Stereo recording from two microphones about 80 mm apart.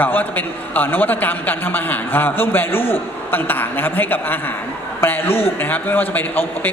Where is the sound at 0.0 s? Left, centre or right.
Left.